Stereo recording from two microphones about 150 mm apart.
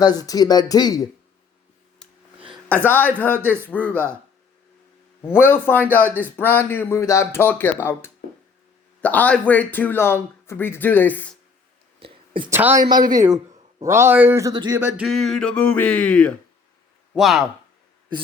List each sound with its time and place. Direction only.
0.0 s speech: 25° left (ahead or behind)
2.0 s a sound: 5° left (ahead or behind)
2.6 s speech: 10° left (ahead or behind)
5.3 s speech: 15° left (ahead or behind)
11.9 s a sound: 35° right (ahead or behind)
12.5 s speech: 15° right (ahead or behind)
13.8 s speech: 15° right (ahead or behind)
14.5 s speech: 30° right (ahead or behind)
14.8 s speech: 15° right (ahead or behind)
15.0 s speech: centre (ahead or behind)